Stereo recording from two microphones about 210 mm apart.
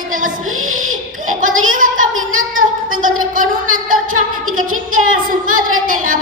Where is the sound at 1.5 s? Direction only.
80° right.